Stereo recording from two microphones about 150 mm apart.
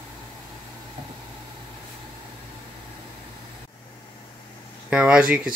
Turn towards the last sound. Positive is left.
turn(degrees=-10)  # may be behind; listen again after turning